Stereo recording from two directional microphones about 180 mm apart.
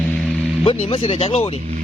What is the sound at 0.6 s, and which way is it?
Speech, 30° left (ahead or behind).